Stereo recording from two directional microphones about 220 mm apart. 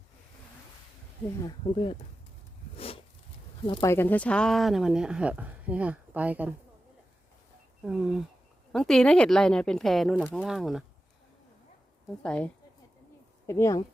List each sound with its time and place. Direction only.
1.5 s speech: 20° left (ahead or behind)
2.7 s a sound: 25° left (ahead or behind)
3.7 s speech: 15° left (ahead or behind); by 6.5 s 5° right (ahead or behind)
7.9 s speech: 5° right (ahead or behind)
12.2 s speech: 5° left (ahead or behind)
13.5 s speech: 15° left (ahead or behind)